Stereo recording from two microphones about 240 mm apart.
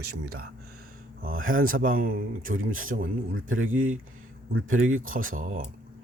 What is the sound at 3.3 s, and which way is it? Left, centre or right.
A man's voice, right.